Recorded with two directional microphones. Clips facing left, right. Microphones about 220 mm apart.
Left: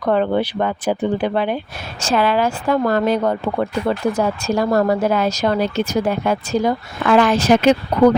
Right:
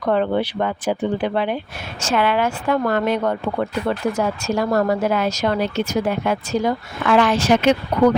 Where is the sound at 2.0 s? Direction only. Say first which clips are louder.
Left 2 dB; 35° left (ahead or behind).